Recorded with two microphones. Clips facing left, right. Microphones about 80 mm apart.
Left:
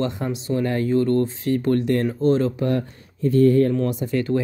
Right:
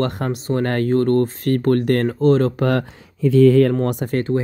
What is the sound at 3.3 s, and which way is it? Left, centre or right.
Speech, right.